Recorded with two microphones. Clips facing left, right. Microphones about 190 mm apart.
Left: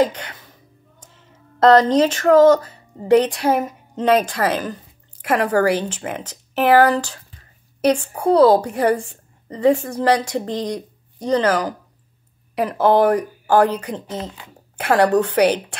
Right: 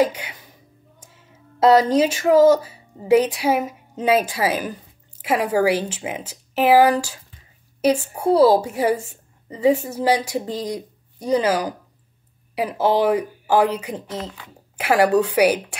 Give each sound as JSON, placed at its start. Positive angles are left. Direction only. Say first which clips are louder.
{"t": 0.0, "sound": "a woman's voice", "louder": "left 1 dB", "side_deg": -10}
{"t": 14.0, "sound": "speech", "louder": "left 1 dB", "side_deg": 25}
{"t": 14.8, "sound": "a woman's voice", "louder": "left 1 dB", "side_deg": -10}